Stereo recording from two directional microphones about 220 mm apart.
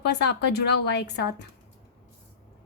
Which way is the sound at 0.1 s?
50° left (ahead or behind).